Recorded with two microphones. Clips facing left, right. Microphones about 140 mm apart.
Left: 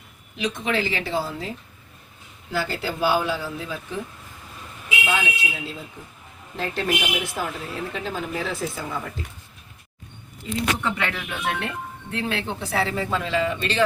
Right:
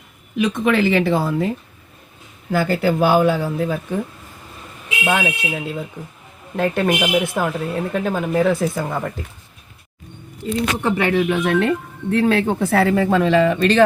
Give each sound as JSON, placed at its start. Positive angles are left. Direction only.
{"t": 0.3, "sound": "speech", "side_deg": -55}
{"t": 2.5, "sound": "speech", "side_deg": -55}
{"t": 5.0, "sound": "speech", "side_deg": -55}
{"t": 10.8, "sound": "speech", "side_deg": -45}